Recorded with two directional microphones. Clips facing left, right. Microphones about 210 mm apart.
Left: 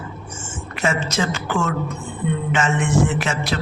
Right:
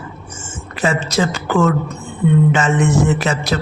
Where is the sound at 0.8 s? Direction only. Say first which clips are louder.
Right 4 dB; 35° right (ahead or behind).